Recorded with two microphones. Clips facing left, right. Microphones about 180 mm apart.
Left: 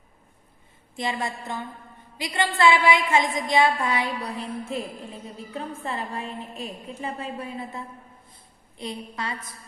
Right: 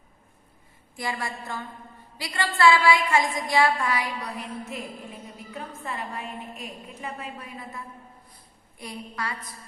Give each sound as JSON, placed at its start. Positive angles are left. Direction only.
{"t": 0.9, "sound": "a woman's voice", "side_deg": 20}